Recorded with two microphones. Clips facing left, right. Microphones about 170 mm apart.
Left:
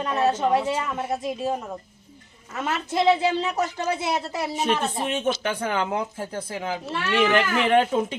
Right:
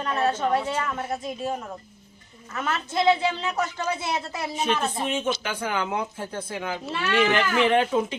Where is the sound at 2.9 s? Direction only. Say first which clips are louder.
Left 2 dB; 35° left (ahead or behind).